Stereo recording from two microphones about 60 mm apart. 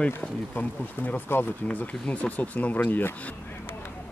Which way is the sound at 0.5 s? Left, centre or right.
Left.